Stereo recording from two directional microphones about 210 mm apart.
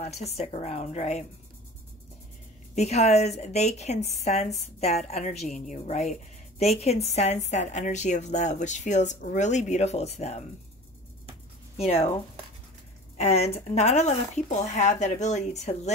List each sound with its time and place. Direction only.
0.0 s a woman's voice: 30° left (ahead or behind)
2.7 s a woman's voice: 30° left (ahead or behind)
11.7 s speech: 30° left (ahead or behind)
13.2 s a woman's voice: 30° left (ahead or behind)